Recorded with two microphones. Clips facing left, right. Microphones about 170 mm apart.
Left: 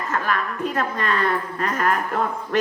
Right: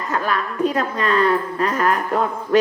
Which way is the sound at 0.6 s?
35° right (ahead or behind).